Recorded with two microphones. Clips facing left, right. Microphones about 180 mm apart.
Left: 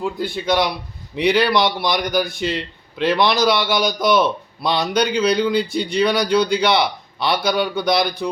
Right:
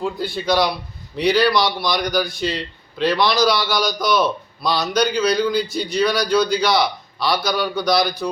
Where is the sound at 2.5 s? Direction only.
55° left (ahead or behind).